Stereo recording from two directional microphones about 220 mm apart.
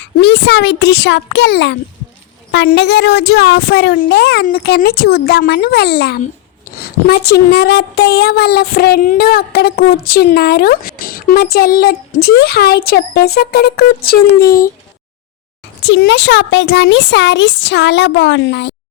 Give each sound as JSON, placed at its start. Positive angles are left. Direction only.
{"t": 0.2, "sound": "speech", "side_deg": 50}
{"t": 15.8, "sound": "speech", "side_deg": 50}